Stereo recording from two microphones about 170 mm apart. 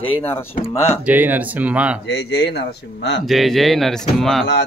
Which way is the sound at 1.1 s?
10° right (ahead or behind).